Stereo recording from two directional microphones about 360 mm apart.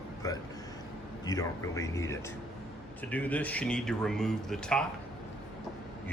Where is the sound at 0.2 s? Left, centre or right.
Centre.